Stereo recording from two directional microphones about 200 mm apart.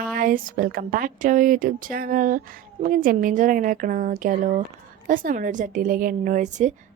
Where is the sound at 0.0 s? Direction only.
45° right (ahead or behind).